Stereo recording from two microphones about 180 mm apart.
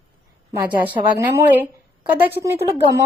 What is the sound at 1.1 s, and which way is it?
A woman's voice, 15° right (ahead or behind).